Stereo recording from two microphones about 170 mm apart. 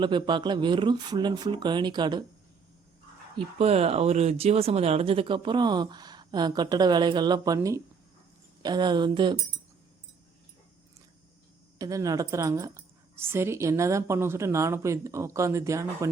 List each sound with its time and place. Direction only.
0.0 s speech: 25° right (ahead or behind)
3.3 s speech: 35° right (ahead or behind)
11.8 s a woman's voice: 20° right (ahead or behind)